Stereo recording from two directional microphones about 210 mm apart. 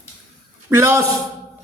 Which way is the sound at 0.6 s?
10° right (ahead or behind).